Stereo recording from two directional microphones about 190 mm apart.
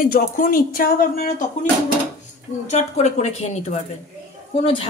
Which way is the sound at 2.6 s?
35° left (ahead or behind).